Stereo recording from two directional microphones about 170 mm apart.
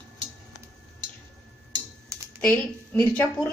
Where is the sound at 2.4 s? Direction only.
10° left (ahead or behind).